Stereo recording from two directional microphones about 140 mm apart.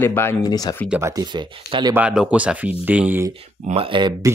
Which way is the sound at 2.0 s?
10° right (ahead or behind).